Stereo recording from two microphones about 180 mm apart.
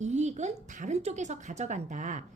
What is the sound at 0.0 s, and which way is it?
A woman's voice, 40° right (ahead or behind).